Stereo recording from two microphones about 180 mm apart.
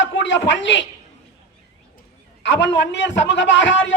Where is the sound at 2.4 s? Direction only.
80° left.